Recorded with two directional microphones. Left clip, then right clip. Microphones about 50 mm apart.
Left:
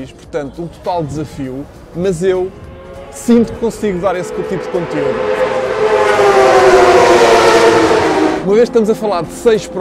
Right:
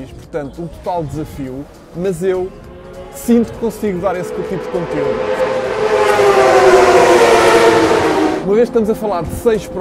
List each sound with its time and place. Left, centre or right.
0.3 s a man's voice: centre
5.5 s train: left
5.9 s civil defense siren: left; by 7.8 s centre
7.8 s a sound: left
9.5 s a man's voice: centre